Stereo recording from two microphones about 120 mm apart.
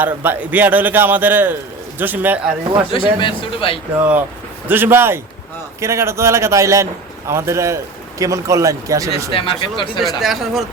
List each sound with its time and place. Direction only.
0.0 s a man's voice: 15° right (ahead or behind)
2.9 s a man's voice: 45° left (ahead or behind)
3.9 s a man's voice: 15° right (ahead or behind)
9.3 s a man's voice: 45° left (ahead or behind)
10.0 s speech: centre (ahead or behind)